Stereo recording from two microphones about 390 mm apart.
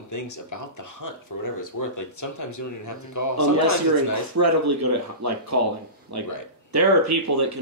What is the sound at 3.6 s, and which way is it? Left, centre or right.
Speech, right.